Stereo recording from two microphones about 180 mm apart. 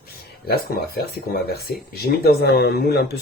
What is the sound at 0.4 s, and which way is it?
Speech, 60° left (ahead or behind).